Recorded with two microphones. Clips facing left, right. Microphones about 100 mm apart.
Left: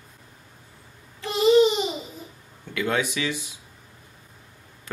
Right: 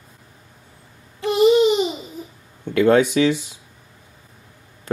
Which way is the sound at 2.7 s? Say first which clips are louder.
Right 11 dB; 35° right (ahead or behind).